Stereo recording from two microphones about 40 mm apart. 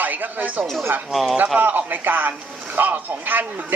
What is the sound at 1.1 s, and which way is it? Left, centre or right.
Speech, centre.